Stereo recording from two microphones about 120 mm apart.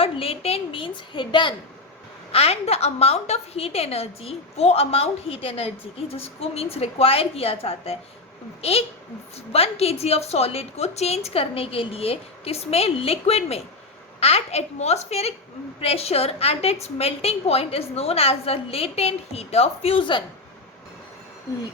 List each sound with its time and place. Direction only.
0.0 s a woman's voice: 55° left (ahead or behind)
2.3 s a woman's voice: 55° left (ahead or behind)
21.5 s a sound: 25° left (ahead or behind)